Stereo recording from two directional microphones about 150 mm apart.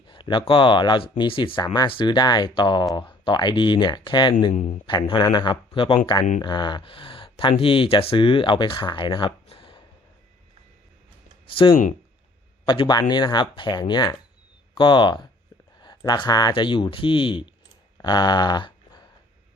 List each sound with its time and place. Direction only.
0.1 s speech: 30° left (ahead or behind)
11.5 s speech: 35° left (ahead or behind)
17.9 s a sound: 30° left (ahead or behind)